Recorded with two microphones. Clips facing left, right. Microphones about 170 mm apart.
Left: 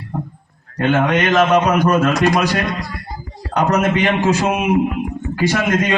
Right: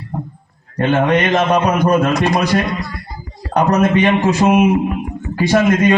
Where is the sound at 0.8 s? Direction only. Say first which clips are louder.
Right 2 dB; 30° right (ahead or behind).